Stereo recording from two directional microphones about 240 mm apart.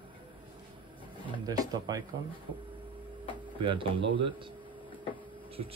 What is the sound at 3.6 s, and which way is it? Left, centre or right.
Speech, right.